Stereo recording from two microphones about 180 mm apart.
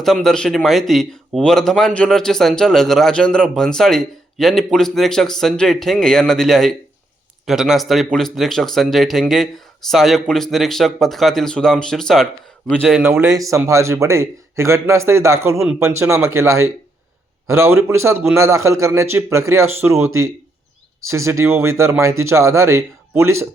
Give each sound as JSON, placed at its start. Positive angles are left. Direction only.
{"t": 0.0, "sound": "speech", "side_deg": 0}
{"t": 13.0, "sound": "a man's voice", "side_deg": -15}